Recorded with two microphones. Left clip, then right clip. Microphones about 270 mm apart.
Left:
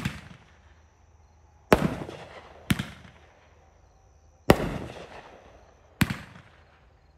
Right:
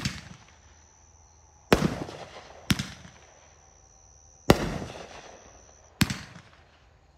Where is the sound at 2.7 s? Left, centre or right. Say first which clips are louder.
Right 1 dB; centre.